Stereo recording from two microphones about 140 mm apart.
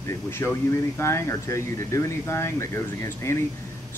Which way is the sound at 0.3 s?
15° left (ahead or behind).